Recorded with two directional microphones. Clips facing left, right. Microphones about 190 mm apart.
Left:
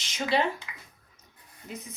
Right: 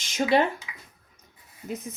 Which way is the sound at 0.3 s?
55° right (ahead or behind).